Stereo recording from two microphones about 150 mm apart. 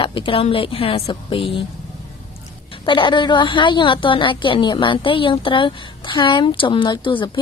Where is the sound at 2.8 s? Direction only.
30° left (ahead or behind).